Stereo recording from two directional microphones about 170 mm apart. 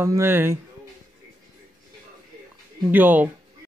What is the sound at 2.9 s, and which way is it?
Speech, 10° right (ahead or behind).